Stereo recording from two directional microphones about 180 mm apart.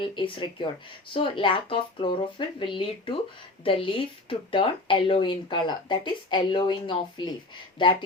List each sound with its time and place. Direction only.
0.2 s speech: 25° left (ahead or behind)